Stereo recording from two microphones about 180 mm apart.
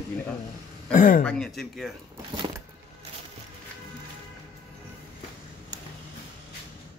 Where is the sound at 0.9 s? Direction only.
45° left (ahead or behind).